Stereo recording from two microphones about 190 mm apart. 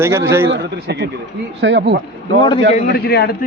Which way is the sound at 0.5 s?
65° right (ahead or behind).